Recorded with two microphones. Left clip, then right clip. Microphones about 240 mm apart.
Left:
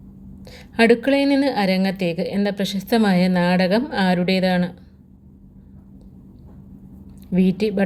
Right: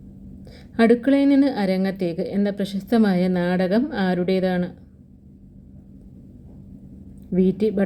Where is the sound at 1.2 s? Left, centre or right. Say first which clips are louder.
Right 1 dB; centre.